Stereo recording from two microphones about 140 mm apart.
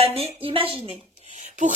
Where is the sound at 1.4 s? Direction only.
60° right (ahead or behind).